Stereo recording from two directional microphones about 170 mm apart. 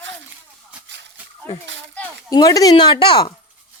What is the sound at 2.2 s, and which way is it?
Speech, 20° left (ahead or behind).